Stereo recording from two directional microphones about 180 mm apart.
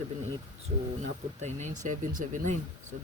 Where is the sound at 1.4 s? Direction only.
40° right (ahead or behind).